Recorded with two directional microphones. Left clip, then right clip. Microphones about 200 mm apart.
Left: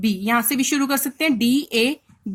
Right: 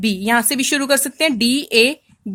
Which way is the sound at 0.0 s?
40° right (ahead or behind).